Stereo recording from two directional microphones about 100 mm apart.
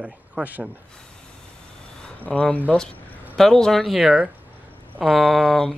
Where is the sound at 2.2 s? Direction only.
15° left (ahead or behind).